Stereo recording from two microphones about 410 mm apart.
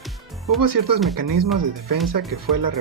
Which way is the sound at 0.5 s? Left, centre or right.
Right.